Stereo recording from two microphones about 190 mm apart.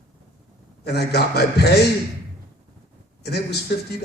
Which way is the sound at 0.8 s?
60° left (ahead or behind).